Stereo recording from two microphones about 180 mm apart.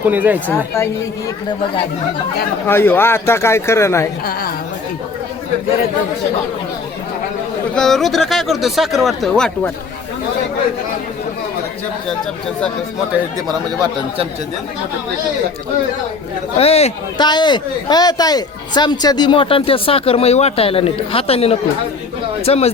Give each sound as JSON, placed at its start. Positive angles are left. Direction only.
{"t": 0.0, "sound": "speech", "side_deg": -10}
{"t": 0.4, "sound": "a man's voice", "side_deg": 15}
{"t": 2.6, "sound": "a man's voice", "side_deg": 10}
{"t": 4.3, "sound": "a woman's voice", "side_deg": 55}
{"t": 7.8, "sound": "speech", "side_deg": 0}
{"t": 16.6, "sound": "a man's voice", "side_deg": 35}